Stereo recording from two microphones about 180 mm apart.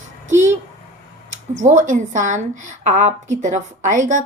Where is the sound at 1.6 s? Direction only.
40° right (ahead or behind).